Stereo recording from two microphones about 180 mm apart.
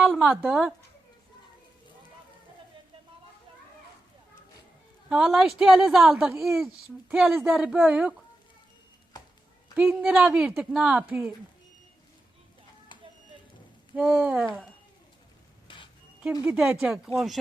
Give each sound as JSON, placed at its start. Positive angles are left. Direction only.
{"t": 0.0, "sound": "a woman's voice", "side_deg": -5}
{"t": 5.0, "sound": "a woman's voice", "side_deg": 0}
{"t": 9.7, "sound": "a woman's voice", "side_deg": -10}
{"t": 13.9, "sound": "a woman's voice", "side_deg": -5}
{"t": 15.6, "sound": "a sound", "side_deg": 30}
{"t": 16.4, "sound": "a woman's voice", "side_deg": -10}